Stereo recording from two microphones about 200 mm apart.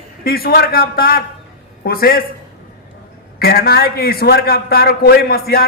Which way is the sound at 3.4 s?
50° left (ahead or behind).